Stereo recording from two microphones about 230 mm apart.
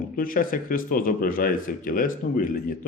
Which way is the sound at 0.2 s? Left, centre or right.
Left.